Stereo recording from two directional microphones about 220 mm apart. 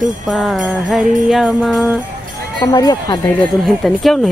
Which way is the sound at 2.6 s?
15° left (ahead or behind).